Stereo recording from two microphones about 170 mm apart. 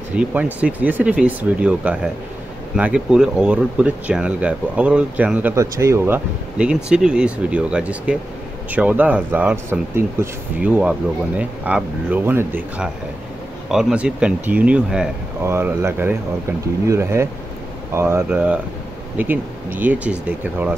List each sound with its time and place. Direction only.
0.1 s speech: 10° right (ahead or behind)